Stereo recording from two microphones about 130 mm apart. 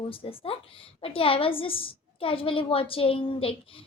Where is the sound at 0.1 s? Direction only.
45° left (ahead or behind).